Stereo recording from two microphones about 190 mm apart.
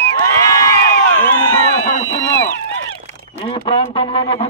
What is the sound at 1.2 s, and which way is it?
Speech, 10° left (ahead or behind).